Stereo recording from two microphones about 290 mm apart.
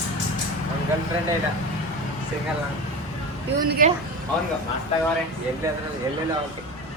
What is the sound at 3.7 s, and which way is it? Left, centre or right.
Speech, right.